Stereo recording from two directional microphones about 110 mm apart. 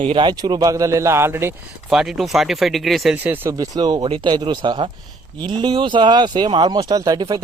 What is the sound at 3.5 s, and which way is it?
A man's voice, 35° right (ahead or behind).